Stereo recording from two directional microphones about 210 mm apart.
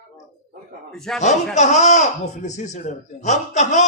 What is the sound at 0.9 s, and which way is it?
Speech, centre (ahead or behind).